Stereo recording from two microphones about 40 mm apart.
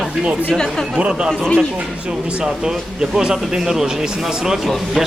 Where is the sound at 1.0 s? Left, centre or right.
Right.